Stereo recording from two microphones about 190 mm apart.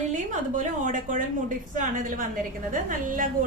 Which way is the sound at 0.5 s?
45° right (ahead or behind).